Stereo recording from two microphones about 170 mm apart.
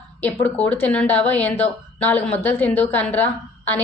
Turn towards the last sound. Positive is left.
turn(degrees=10)  # may be behind; listen again after turning